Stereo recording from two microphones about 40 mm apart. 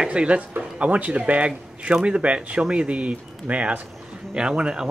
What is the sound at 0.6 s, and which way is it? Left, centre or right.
Speech, right.